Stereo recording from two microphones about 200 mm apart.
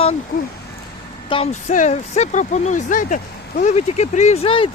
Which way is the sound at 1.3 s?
25° left (ahead or behind).